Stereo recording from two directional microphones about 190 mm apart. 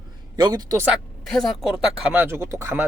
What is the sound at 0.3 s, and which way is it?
Speech, 20° right (ahead or behind).